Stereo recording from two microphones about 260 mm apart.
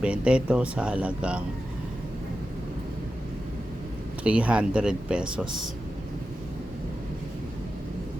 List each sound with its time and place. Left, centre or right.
0.0 s speech: centre
4.2 s speech: centre